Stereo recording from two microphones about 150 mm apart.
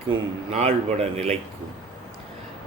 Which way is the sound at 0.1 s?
45° right (ahead or behind).